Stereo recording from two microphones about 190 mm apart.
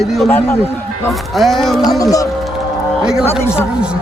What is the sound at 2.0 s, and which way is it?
Speech, 20° left (ahead or behind).